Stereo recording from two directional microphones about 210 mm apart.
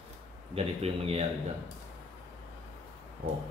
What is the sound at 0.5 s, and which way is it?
Speech, 30° right (ahead or behind).